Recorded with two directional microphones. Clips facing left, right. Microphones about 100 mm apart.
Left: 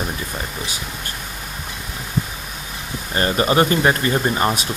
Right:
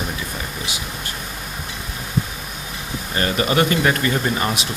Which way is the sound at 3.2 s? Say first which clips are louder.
Left 2 dB; 30° left (ahead or behind).